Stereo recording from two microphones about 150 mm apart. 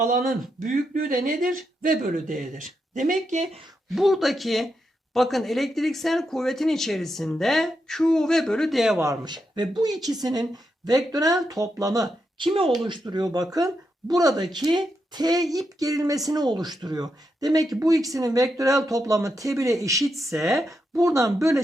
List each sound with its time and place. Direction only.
0.0 s speech: 65° right (ahead or behind)
3.9 s speech: centre (ahead or behind)
9.0 s speech: 25° right (ahead or behind)
12.4 s speech: 35° right (ahead or behind)
20.1 s speech: centre (ahead or behind)
21.0 s speech: 20° right (ahead or behind)